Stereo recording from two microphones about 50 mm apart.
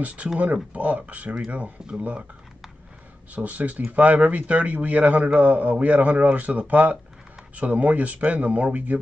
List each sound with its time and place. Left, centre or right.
0.0 s speech: right
1.8 s speech: centre
3.3 s speech: right